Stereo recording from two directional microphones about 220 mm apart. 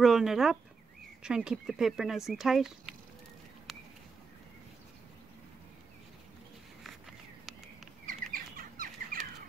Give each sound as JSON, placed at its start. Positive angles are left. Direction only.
{"t": 0.0, "sound": "speech", "side_deg": 0}
{"t": 8.1, "sound": "bird", "side_deg": -40}